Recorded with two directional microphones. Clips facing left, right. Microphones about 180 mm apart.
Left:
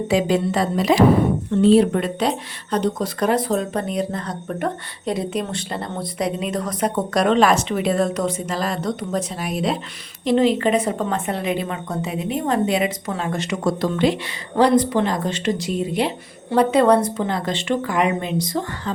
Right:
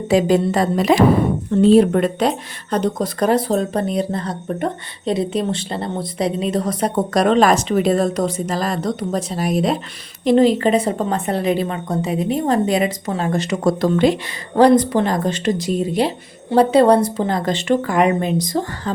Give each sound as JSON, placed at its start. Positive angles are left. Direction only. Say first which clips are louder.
{"t": 0.1, "sound": "a woman's voice", "louder": "right 5 dB", "side_deg": -40}